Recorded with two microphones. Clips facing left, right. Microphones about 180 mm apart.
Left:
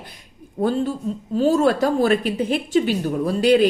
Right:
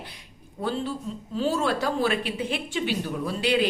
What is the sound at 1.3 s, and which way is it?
Speech, 45° left (ahead or behind).